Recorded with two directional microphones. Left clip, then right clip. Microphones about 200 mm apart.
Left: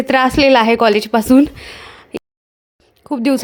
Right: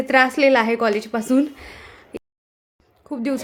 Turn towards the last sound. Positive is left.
turn(degrees=35)  # may be behind; listen again after turning